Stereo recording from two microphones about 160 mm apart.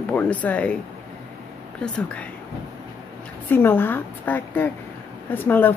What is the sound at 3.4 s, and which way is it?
Speech, 15° left (ahead or behind).